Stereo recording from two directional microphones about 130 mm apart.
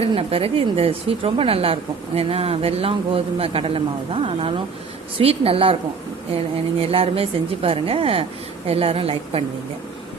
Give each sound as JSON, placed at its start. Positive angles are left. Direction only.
{"t": 0.0, "sound": "speech", "side_deg": -50}